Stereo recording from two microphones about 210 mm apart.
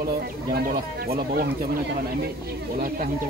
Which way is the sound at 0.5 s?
45° right (ahead or behind).